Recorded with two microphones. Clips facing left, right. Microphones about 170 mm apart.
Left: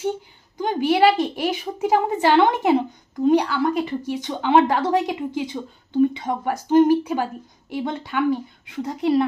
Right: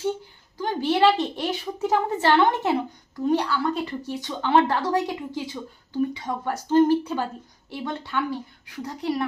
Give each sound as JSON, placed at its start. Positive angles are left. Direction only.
{"t": 0.6, "sound": "a woman's voice", "side_deg": 15}